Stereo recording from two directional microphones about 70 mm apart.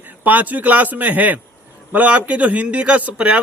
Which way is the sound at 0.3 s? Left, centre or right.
Right.